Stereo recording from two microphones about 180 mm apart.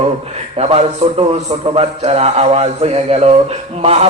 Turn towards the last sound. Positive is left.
turn(degrees=-35)  # may be behind; listen again after turning